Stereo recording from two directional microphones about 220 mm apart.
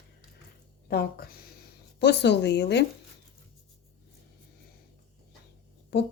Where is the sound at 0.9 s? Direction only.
45° left (ahead or behind).